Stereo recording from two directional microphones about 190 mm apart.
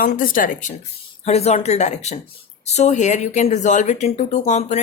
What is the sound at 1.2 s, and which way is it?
Speech, 35° left (ahead or behind).